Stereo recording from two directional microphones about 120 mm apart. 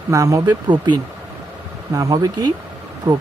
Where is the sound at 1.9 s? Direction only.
30° right (ahead or behind).